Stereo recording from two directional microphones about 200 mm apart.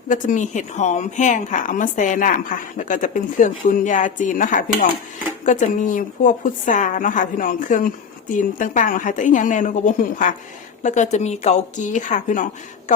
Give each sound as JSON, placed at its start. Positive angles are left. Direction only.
{"t": 0.1, "sound": "a woman's voice", "side_deg": 40}